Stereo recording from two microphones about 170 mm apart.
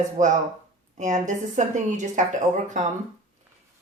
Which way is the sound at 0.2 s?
45° right (ahead or behind).